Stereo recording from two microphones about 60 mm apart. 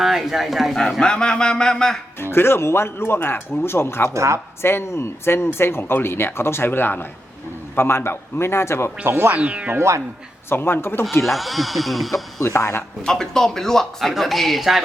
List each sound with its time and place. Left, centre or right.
0.0 s speech: centre
0.8 s a man's voice: centre
2.1 s speech: left
4.1 s speech: right
4.6 s speech: left
9.0 s speech: right
9.4 s speech: right
10.5 s speech: left
11.2 s speech: centre
12.5 s speech: left
13.1 s a man's voice: centre